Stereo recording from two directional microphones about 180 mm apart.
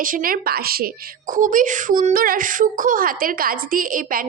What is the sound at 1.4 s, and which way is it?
A child's voice, 45° right (ahead or behind).